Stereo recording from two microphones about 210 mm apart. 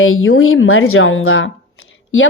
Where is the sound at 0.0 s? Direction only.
75° left (ahead or behind).